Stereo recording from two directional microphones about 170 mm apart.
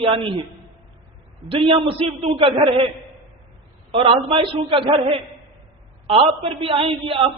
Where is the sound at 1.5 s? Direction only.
30° right (ahead or behind).